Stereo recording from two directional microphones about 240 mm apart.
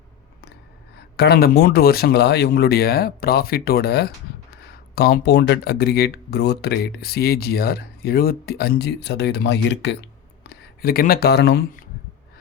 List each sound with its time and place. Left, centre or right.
1.1 s speech: left